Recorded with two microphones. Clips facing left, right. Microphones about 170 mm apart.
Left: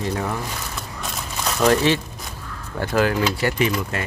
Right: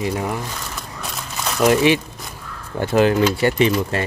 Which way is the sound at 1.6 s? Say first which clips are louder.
Right 3 dB; 15° right (ahead or behind).